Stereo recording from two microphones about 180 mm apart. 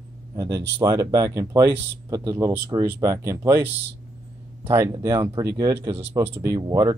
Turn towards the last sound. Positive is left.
turn(degrees=-15)  # may be behind; listen again after turning